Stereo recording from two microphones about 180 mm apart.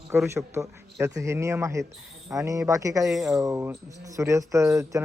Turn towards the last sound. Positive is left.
turn(degrees=-15)  # may be behind; listen again after turning